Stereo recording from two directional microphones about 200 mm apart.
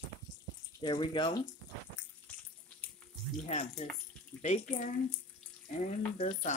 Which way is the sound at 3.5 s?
35° left (ahead or behind).